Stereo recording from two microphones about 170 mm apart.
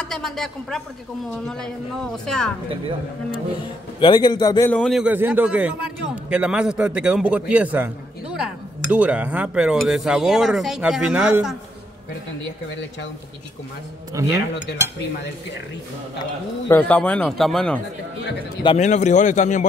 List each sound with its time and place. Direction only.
0.0 s a man's voice: 5° left (ahead or behind)
4.0 s a man's voice: 25° left (ahead or behind)
4.6 s a man's voice: 5° left (ahead or behind)
5.0 s a man's voice: 10° right (ahead or behind)
14.2 s speech: 20° right (ahead or behind)
16.6 s speech: 10° left (ahead or behind)
18.8 s a man's voice: 45° left (ahead or behind)